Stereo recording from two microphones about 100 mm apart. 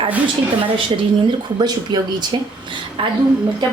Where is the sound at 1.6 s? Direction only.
45° right (ahead or behind).